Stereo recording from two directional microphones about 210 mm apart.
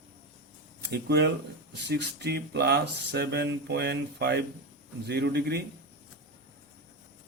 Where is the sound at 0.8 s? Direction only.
50° right (ahead or behind).